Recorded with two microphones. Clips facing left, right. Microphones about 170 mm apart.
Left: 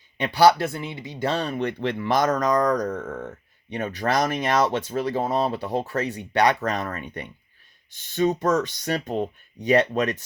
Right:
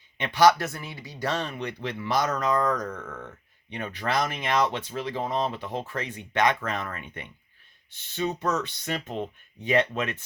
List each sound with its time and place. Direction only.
0.2 s speech: 35° left (ahead or behind)
1.5 s speech: 55° left (ahead or behind)